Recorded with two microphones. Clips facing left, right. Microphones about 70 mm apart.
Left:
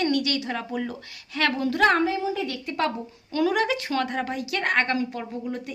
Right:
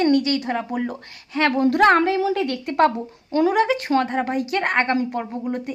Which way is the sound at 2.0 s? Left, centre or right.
Right.